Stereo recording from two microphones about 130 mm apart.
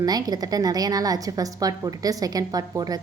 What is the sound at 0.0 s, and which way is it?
A woman's voice, 30° right (ahead or behind).